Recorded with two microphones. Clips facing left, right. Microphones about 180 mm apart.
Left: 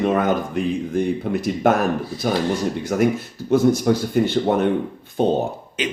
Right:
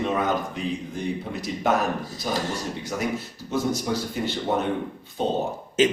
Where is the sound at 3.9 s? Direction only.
60° left (ahead or behind).